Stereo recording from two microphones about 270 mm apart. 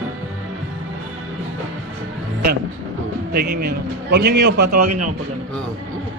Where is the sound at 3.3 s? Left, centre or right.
Right.